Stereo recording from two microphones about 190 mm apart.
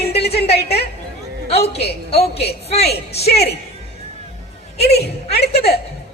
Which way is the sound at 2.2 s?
60° left (ahead or behind).